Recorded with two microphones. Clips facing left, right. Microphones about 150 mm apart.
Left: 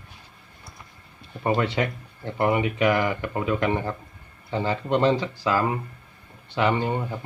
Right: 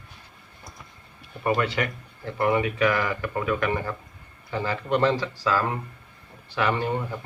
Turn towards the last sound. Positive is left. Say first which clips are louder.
# left 1 dB
turn(degrees=20)  # may be behind; listen again after turning